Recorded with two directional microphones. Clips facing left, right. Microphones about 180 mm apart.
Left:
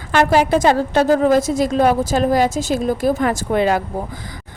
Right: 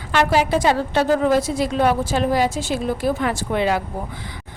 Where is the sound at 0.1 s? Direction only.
50° left (ahead or behind).